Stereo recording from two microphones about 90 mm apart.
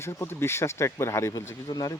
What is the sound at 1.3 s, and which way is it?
Speech, 45° left (ahead or behind).